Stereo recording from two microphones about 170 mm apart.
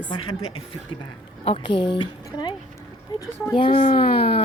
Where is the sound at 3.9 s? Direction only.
30° left (ahead or behind).